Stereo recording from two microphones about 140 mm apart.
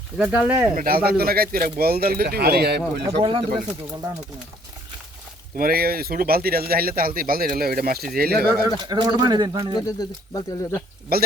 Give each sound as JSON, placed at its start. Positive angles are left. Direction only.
{"t": 0.2, "sound": "speech", "side_deg": -10}
{"t": 0.8, "sound": "speech", "side_deg": -90}
{"t": 3.2, "sound": "speech", "side_deg": -40}
{"t": 5.5, "sound": "speech", "side_deg": -90}
{"t": 8.8, "sound": "speech", "side_deg": -30}
{"t": 9.8, "sound": "speech", "side_deg": 25}
{"t": 11.1, "sound": "speech", "side_deg": -90}